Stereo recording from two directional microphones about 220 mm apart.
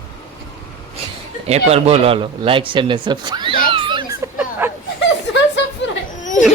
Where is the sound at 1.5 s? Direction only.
30° right (ahead or behind).